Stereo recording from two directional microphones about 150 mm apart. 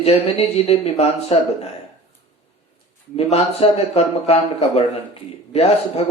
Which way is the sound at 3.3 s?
45° left (ahead or behind).